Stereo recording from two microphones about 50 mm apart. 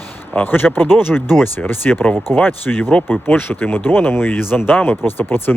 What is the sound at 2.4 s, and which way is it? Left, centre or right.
Speech, left.